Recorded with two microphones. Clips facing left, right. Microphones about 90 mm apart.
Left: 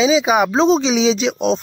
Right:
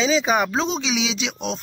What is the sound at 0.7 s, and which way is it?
Speech, 35° left (ahead or behind).